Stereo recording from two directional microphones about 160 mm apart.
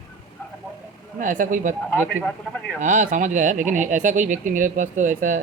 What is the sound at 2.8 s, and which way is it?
Speech, 55° right (ahead or behind).